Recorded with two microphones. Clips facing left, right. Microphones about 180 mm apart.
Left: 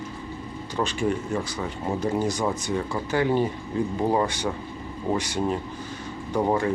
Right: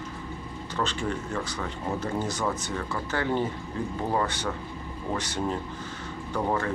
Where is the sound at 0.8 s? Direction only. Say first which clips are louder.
Left 5 dB; 10° left (ahead or behind).